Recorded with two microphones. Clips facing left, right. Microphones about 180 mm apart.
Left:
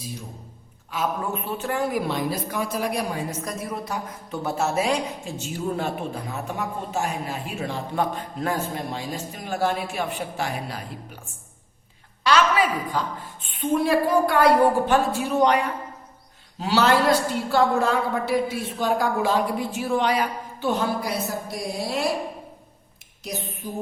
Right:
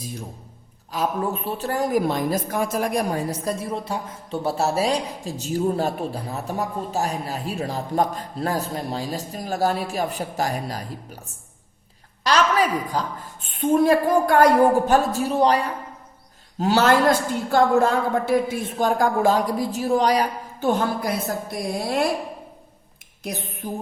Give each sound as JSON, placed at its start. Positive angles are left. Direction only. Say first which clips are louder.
{"t": 0.9, "sound": "a woman's voice", "louder": "right 3 dB", "side_deg": -35}
{"t": 12.2, "sound": "a woman's voice", "louder": "even", "side_deg": -40}
{"t": 16.6, "sound": "a woman's voice", "louder": "right 2 dB", "side_deg": -45}
{"t": 23.6, "sound": "music", "louder": "right 5 dB", "side_deg": -60}